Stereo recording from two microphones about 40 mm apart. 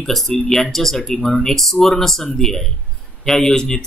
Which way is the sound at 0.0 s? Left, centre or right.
Centre.